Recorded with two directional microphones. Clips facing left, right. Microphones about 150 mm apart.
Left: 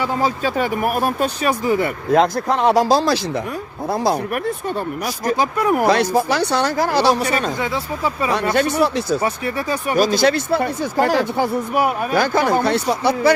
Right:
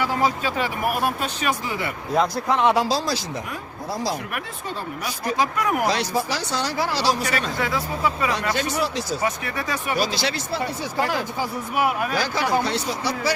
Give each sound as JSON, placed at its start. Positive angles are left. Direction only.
{"t": 0.2, "sound": "speech", "side_deg": 35}
{"t": 2.1, "sound": "speech", "side_deg": 50}
{"t": 2.5, "sound": "speech", "side_deg": 40}
{"t": 3.0, "sound": "speech", "side_deg": 60}
{"t": 5.0, "sound": "speech", "side_deg": 35}
{"t": 5.8, "sound": "speech", "side_deg": 55}
{"t": 7.6, "sound": "speech", "side_deg": 25}
{"t": 8.5, "sound": "speech", "side_deg": 55}
{"t": 9.2, "sound": "speech", "side_deg": 30}
{"t": 9.9, "sound": "speech", "side_deg": 45}
{"t": 12.1, "sound": "speech", "side_deg": 55}